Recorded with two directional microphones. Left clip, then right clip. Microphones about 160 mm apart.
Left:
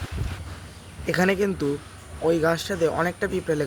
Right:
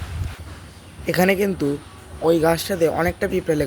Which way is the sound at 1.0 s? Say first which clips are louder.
Right 4 dB; 10° right (ahead or behind).